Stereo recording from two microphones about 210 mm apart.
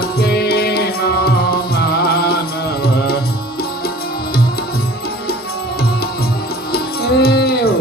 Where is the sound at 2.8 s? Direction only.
50° left (ahead or behind).